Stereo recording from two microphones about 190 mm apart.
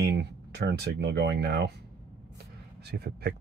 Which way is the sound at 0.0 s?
60° right (ahead or behind).